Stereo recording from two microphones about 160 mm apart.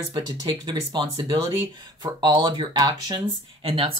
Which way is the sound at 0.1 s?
25° right (ahead or behind).